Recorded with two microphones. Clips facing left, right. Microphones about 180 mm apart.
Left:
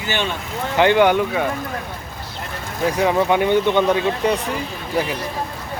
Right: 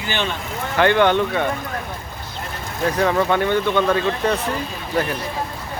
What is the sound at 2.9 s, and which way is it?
Speech, 15° left (ahead or behind).